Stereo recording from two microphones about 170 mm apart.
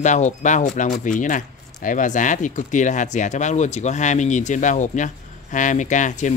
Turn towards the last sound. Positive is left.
turn(degrees=45)  # may be behind; listen again after turning